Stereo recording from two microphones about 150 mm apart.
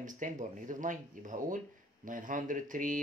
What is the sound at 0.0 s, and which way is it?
Speech, 60° right (ahead or behind).